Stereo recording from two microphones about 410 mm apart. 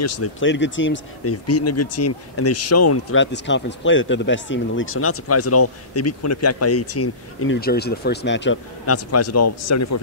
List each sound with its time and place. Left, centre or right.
0.0 s speech: left